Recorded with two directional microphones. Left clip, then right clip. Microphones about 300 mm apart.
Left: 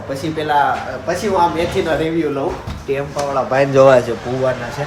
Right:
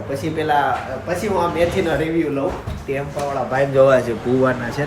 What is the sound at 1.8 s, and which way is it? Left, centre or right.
Speech, centre.